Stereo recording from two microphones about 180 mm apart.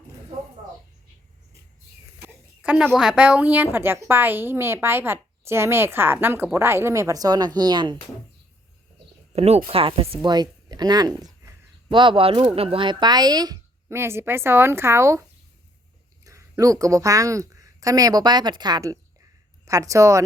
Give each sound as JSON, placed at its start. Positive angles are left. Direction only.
{"t": 2.2, "sound": "a woman's voice", "side_deg": -5}
{"t": 9.3, "sound": "a woman's voice", "side_deg": -35}
{"t": 16.2, "sound": "a woman's voice", "side_deg": -20}